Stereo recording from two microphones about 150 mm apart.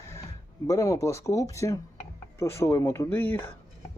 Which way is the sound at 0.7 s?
20° left (ahead or behind).